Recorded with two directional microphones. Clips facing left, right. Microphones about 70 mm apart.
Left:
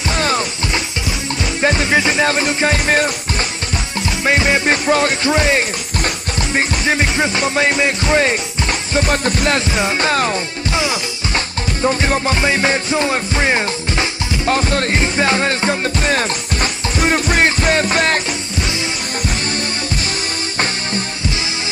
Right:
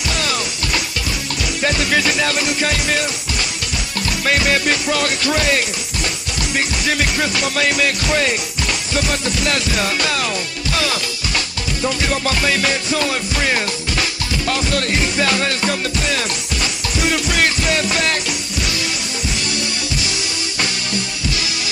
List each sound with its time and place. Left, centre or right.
0.1 s music: left
1.6 s music: left
4.2 s music: left
9.8 s music: left